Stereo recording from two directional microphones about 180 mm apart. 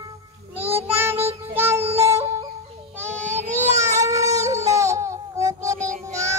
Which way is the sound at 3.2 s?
40° right (ahead or behind).